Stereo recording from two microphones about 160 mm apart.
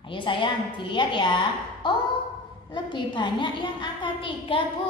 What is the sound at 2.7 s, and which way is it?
A woman's voice, 30° left (ahead or behind).